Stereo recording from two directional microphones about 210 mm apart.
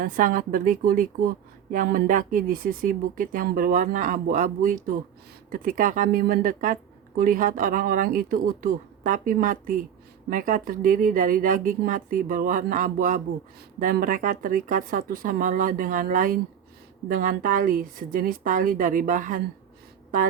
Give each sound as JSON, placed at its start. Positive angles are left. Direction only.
{"t": 0.0, "sound": "a woman's voice", "side_deg": -40}